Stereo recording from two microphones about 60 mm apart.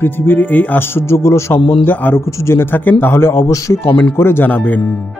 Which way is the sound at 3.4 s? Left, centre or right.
Left.